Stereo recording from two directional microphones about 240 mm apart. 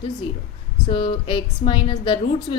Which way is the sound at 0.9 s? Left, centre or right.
Left.